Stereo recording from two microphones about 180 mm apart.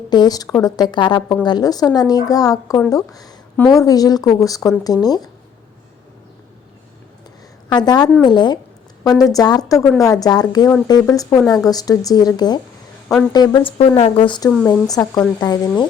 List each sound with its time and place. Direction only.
0.1 s a woman's voice: 20° left (ahead or behind)
7.7 s a woman's voice: 25° left (ahead or behind)